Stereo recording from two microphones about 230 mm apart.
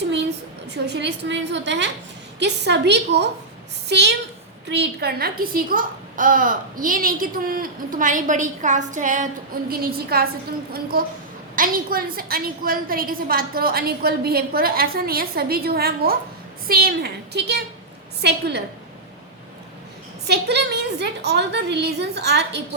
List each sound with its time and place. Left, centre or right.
0.9 s a woman's voice: right
20.2 s a woman's voice: right